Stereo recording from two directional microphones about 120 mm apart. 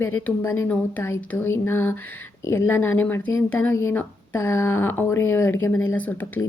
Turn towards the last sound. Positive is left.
turn(degrees=15)  # may be behind; listen again after turning